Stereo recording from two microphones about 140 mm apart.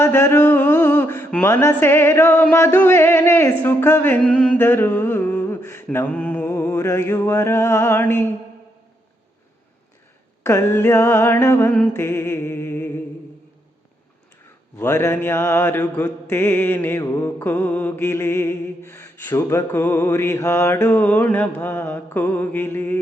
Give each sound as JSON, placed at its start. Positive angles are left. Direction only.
{"t": 0.0, "sound": "speech", "side_deg": 20}
{"t": 2.7, "sound": "mantra", "side_deg": 15}
{"t": 4.2, "sound": "a sound", "side_deg": 10}
{"t": 6.6, "sound": "music", "side_deg": 25}
{"t": 10.4, "sound": "mantra", "side_deg": 20}
{"t": 14.8, "sound": "mantra", "side_deg": 20}